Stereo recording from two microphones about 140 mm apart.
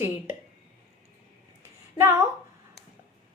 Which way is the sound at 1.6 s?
20° right (ahead or behind).